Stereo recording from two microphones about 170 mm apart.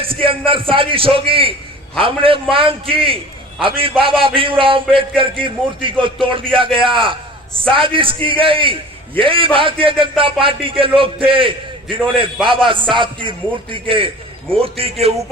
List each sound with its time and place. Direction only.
0.0 s a man's voice: 30° right (ahead or behind)